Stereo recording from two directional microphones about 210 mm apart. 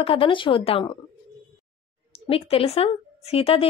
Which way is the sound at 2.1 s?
30° left (ahead or behind).